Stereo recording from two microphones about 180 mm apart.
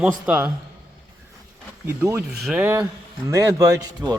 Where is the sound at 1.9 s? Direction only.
10° right (ahead or behind).